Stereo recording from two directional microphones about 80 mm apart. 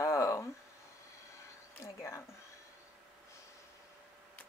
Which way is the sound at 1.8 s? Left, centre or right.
Left.